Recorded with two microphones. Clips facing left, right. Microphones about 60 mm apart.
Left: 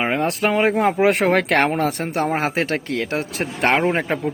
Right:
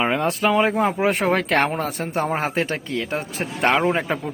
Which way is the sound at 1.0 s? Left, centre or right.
Left.